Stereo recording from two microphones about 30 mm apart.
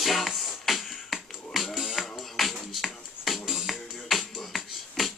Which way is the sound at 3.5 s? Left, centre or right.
Centre.